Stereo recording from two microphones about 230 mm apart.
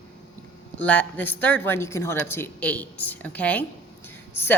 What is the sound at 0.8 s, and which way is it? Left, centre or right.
A woman's voice, centre.